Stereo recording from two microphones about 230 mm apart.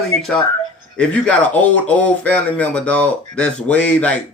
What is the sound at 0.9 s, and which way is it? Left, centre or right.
Speech, centre.